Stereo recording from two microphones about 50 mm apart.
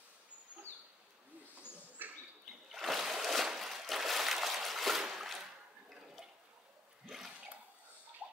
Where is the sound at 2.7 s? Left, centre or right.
Centre.